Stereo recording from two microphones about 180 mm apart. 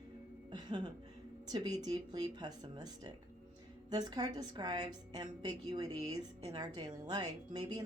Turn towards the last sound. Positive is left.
turn(degrees=-20)  # may be behind; listen again after turning